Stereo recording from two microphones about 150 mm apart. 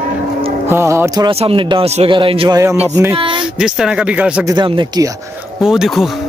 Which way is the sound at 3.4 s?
5° right (ahead or behind).